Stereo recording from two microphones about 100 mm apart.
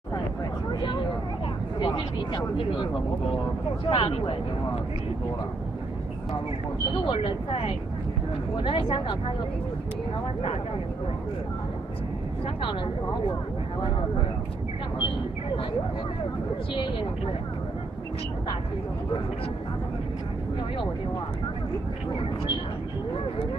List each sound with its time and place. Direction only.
1.8 s speech: 50° left (ahead or behind)
7.1 s speech: 75° left (ahead or behind)